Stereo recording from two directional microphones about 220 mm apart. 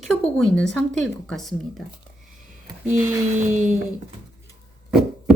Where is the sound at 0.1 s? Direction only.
Centre (ahead or behind).